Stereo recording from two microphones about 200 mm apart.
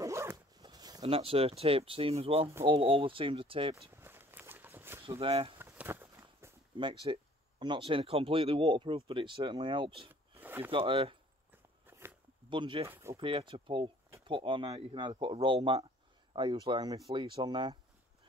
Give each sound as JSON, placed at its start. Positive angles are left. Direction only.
{"t": 0.0, "sound": "zipper", "side_deg": -15}
{"t": 2.6, "sound": "speech", "side_deg": -25}
{"t": 3.7, "sound": "walk", "side_deg": -10}
{"t": 5.2, "sound": "speech", "side_deg": -30}
{"t": 5.6, "sound": "a sound", "side_deg": -10}
{"t": 6.8, "sound": "speech", "side_deg": -25}
{"t": 10.4, "sound": "a sound", "side_deg": -10}
{"t": 10.7, "sound": "speech", "side_deg": -30}
{"t": 11.5, "sound": "a sound", "side_deg": -10}
{"t": 12.4, "sound": "speech", "side_deg": -25}
{"t": 12.8, "sound": "speech", "side_deg": -10}
{"t": 13.2, "sound": "speech", "side_deg": -25}